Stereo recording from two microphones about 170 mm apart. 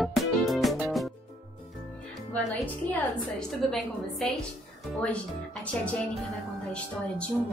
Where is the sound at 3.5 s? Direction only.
Centre (ahead or behind).